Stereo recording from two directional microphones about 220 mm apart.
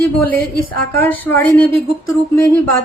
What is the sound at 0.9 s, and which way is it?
Speech, 10° left (ahead or behind).